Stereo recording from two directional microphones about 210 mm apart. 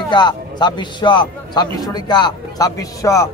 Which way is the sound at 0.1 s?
20° left (ahead or behind).